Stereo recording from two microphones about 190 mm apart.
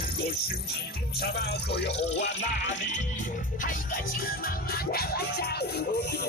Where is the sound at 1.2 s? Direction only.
60° left (ahead or behind).